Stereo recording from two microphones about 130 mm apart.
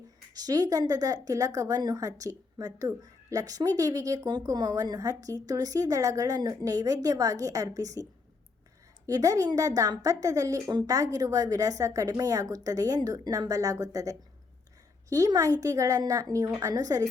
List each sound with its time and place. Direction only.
0.3 s speech: 30° right (ahead or behind)
9.0 s speech: 25° right (ahead or behind)